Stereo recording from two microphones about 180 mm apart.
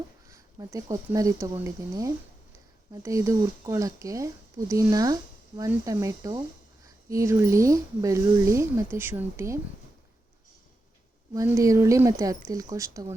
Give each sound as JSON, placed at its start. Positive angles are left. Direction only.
{"t": 0.3, "sound": "speech", "side_deg": -15}
{"t": 11.3, "sound": "speech", "side_deg": -15}